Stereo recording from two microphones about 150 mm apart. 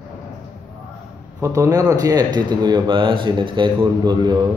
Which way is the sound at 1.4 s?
20° right (ahead or behind).